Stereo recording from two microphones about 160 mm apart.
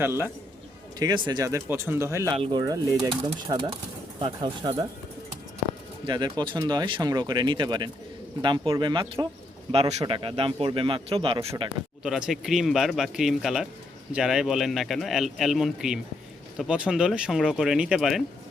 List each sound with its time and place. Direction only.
0.0 s a man's voice: 15° right (ahead or behind)
0.9 s speech: 25° right (ahead or behind)
2.3 s speech: 30° right (ahead or behind)
6.1 s speech: 25° right (ahead or behind)
12.0 s speech: centre (ahead or behind)